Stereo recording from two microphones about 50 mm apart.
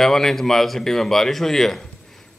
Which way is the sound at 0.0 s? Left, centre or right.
Centre.